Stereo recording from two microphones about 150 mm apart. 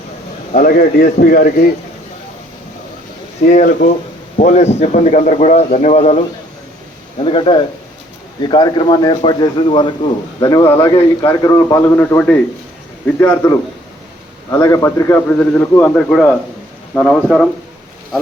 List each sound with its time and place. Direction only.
0.5 s a man's voice: 70° left (ahead or behind)
3.4 s a man's voice: 60° left (ahead or behind)
7.2 s a man's voice: 35° left (ahead or behind); by 17.4 s 5° right (ahead or behind)